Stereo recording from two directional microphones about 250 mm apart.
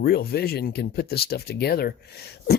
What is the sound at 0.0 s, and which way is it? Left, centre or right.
Speech, left.